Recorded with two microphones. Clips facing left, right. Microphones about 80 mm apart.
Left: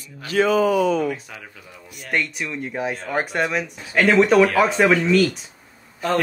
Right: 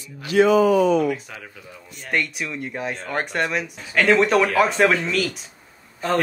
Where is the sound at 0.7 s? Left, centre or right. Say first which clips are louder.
Right 2 dB; right.